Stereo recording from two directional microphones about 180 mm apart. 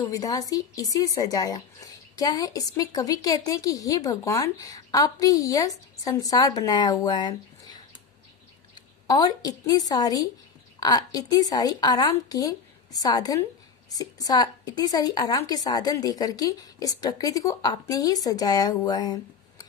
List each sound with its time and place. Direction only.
0.0 s a woman's voice: 20° left (ahead or behind)